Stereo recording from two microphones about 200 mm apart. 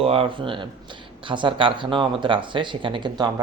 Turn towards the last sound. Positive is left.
turn(degrees=-20)  # may be behind; listen again after turning